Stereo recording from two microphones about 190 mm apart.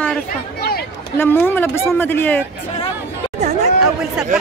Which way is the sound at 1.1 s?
10° left (ahead or behind).